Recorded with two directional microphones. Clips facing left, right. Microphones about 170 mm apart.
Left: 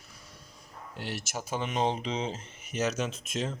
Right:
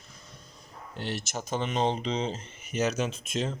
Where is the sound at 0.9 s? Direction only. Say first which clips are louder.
Right 3 dB; 5° left (ahead or behind).